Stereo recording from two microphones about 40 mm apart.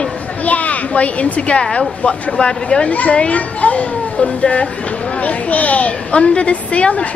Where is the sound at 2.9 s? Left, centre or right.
Left.